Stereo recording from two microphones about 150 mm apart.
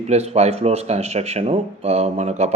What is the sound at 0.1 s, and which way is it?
A man's voice, 45° right (ahead or behind).